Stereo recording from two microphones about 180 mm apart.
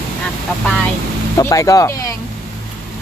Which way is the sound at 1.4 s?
15° left (ahead or behind).